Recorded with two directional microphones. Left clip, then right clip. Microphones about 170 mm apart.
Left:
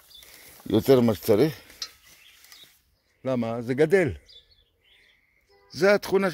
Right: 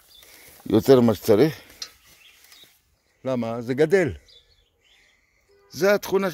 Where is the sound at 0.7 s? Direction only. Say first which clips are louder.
Right 3 dB; 30° right (ahead or behind).